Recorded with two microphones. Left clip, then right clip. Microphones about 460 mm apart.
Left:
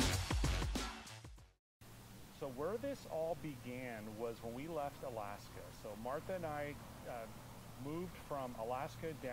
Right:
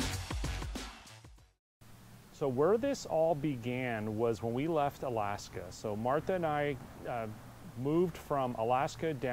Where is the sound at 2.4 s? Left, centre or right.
Right.